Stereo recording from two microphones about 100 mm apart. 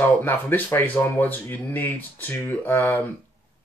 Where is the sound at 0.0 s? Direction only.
20° left (ahead or behind).